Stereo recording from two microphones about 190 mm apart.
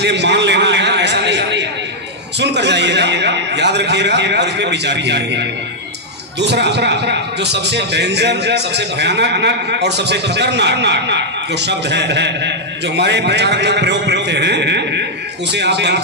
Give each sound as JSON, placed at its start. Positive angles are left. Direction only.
{"t": 0.0, "sound": "a sound", "side_deg": -65}
{"t": 2.4, "sound": "a man's voice", "side_deg": -65}
{"t": 6.5, "sound": "a man's voice", "side_deg": -65}